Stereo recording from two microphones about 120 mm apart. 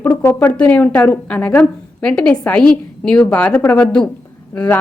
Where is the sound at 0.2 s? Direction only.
20° left (ahead or behind).